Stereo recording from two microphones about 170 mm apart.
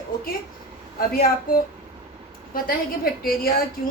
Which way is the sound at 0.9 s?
60° left (ahead or behind).